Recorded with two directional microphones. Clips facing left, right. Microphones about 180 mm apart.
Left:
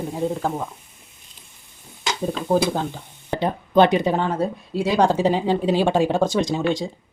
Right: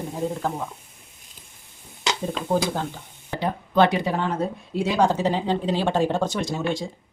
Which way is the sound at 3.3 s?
20° left (ahead or behind).